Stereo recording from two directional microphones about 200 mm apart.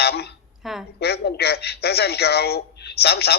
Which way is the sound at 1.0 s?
55° left (ahead or behind).